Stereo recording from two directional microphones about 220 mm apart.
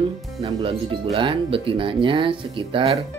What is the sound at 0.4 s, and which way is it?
Speech, 25° right (ahead or behind).